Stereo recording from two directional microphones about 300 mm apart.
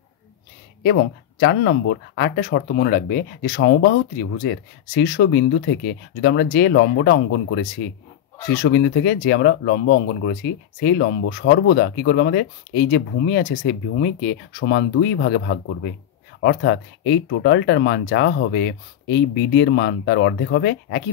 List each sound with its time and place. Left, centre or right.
0.8 s speech: left